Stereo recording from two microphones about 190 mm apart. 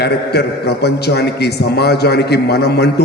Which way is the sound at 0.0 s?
60° left (ahead or behind).